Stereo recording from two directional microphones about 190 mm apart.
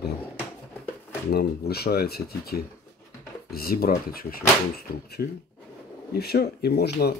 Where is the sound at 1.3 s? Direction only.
55° left (ahead or behind).